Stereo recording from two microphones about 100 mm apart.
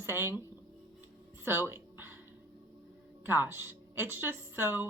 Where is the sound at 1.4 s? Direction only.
25° right (ahead or behind).